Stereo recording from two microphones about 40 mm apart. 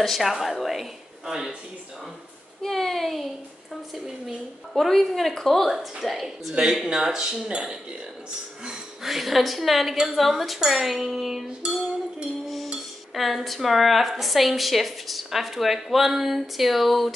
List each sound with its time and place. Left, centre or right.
0.0 s a woman's voice: centre
2.6 s a woman's voice: centre
4.7 s a woman's voice: centre
6.5 s speech: centre
9.0 s a woman's voice: centre
13.1 s a woman's voice: centre